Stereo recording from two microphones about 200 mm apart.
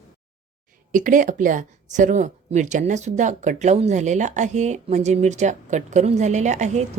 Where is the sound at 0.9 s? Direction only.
40° right (ahead or behind).